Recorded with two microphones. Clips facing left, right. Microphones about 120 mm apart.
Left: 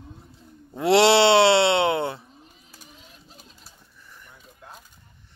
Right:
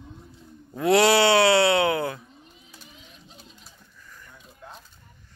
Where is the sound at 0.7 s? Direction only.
25° left (ahead or behind).